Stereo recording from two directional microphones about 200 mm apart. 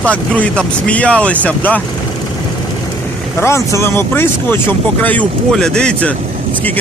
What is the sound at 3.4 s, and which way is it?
Speech, 15° left (ahead or behind).